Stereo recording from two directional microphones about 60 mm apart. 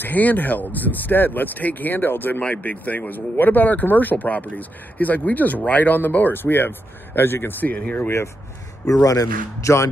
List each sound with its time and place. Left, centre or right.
0.0 s speech: left
8.8 s speech: left